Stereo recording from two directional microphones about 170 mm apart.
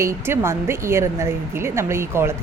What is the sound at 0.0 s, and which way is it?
A woman's voice, 15° right (ahead or behind).